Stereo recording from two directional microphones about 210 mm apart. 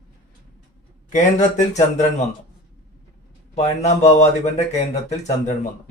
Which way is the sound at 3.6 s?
35° left (ahead or behind).